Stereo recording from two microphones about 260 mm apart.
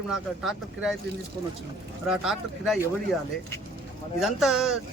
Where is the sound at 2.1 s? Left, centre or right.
Centre.